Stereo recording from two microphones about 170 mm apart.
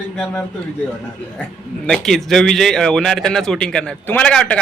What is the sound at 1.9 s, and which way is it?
A man's voice, centre (ahead or behind).